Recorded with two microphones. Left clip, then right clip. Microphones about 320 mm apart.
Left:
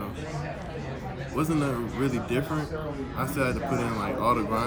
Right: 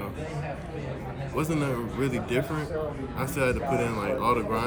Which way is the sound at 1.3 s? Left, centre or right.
Centre.